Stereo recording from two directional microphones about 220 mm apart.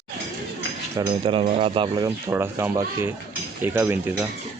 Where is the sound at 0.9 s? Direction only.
20° right (ahead or behind).